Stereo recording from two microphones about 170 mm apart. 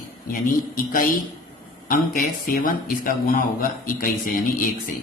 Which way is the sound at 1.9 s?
60° left (ahead or behind).